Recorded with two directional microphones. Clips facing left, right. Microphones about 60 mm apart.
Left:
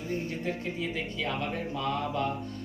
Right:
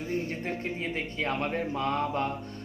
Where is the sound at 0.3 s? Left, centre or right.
Right.